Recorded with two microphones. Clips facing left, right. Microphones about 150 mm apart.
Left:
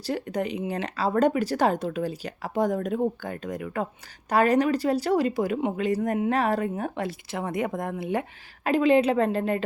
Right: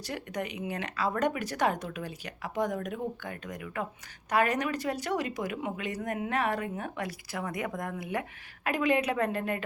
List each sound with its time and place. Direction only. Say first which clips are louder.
0.0 s a woman's voice: left 7 dB; 30° left (ahead or behind)